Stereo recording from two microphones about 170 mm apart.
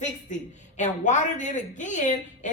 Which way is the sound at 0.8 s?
45° left (ahead or behind).